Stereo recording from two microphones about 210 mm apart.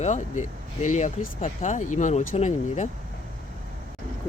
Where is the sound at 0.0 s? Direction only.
35° left (ahead or behind).